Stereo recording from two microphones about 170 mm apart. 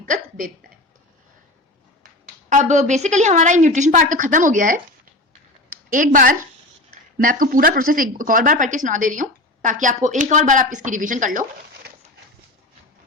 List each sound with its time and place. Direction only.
0.1 s hiccup: 50° right (ahead or behind)
2.5 s speech: 45° right (ahead or behind)